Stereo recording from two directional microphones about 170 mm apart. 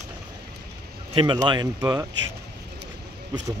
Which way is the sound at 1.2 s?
25° right (ahead or behind).